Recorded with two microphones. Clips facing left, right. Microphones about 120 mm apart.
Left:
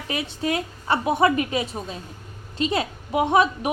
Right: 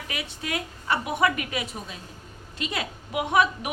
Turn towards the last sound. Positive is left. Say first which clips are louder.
# left 4 dB
turn(degrees=30)  # may be behind; listen again after turning